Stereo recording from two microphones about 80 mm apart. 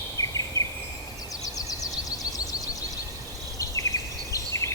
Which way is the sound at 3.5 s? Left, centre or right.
Left.